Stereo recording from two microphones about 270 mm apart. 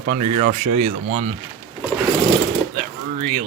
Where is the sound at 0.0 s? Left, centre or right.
Right.